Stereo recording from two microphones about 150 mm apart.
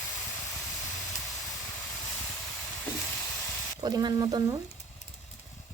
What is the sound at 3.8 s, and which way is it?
Speech, 30° right (ahead or behind).